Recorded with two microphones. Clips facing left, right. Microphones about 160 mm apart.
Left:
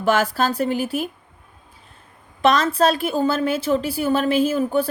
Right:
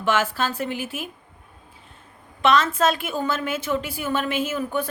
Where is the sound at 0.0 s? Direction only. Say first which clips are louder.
Left 4 dB; 40° left (ahead or behind).